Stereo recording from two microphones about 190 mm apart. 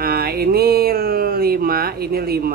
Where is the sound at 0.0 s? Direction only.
55° right (ahead or behind).